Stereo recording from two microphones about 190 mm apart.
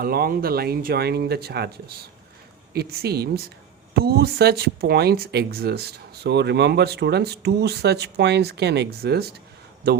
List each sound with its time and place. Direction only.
0.0 s speech: 50° right (ahead or behind)